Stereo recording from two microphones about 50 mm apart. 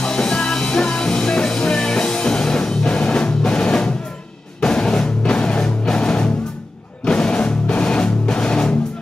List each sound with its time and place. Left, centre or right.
0.0 s music: centre